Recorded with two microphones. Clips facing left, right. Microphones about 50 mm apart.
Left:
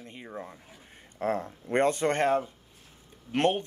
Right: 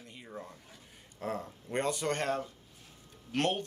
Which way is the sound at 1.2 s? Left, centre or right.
Left.